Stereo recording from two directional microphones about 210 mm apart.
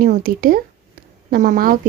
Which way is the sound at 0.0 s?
45° right (ahead or behind).